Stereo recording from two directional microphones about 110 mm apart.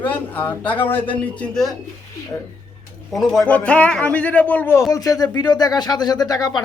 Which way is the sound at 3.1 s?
Centre (ahead or behind).